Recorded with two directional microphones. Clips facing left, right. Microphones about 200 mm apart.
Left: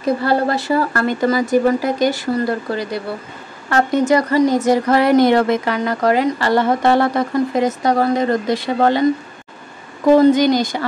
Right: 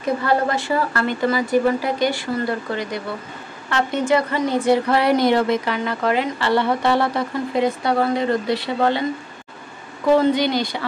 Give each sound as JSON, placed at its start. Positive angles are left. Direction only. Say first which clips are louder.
{"t": 0.2, "sound": "a woman's voice", "louder": "left 3 dB", "side_deg": 35}
{"t": 10.0, "sound": "a woman's voice", "louder": "left 5 dB", "side_deg": 45}